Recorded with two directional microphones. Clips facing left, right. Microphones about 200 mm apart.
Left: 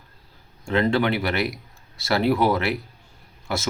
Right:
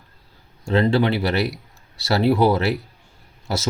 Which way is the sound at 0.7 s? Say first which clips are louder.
Right 3 dB; 30° right (ahead or behind).